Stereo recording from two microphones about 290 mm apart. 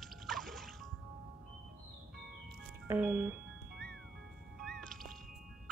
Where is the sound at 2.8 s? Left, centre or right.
Centre.